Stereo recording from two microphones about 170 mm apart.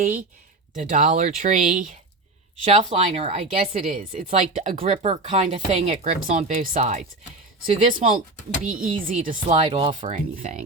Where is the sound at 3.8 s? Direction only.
50° right (ahead or behind); by 10.2 s 35° right (ahead or behind).